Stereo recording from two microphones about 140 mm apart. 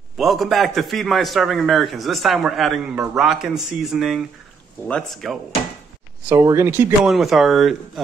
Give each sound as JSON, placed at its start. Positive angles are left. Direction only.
{"t": 0.2, "sound": "a man's voice", "side_deg": 0}
{"t": 6.2, "sound": "speech", "side_deg": -20}
{"t": 7.1, "sound": "a man's voice", "side_deg": 0}